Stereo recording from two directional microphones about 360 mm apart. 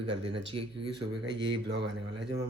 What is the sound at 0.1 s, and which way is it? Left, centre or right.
Speech, centre.